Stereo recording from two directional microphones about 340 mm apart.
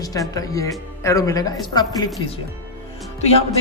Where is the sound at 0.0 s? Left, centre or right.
Centre.